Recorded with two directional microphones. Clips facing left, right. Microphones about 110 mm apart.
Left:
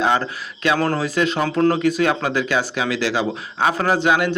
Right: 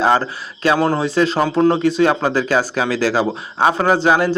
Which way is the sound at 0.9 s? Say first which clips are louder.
Right 4 dB; 30° right (ahead or behind).